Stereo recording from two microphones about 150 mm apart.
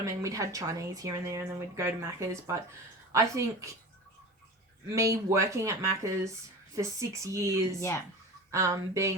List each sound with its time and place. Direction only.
0.0 s speech: 20° right (ahead or behind)
4.9 s speech: 20° right (ahead or behind)
7.8 s speech: 20° left (ahead or behind)
8.4 s speech: 20° right (ahead or behind)